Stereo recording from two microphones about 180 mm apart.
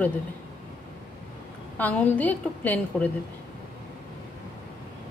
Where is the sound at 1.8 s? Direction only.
10° left (ahead or behind).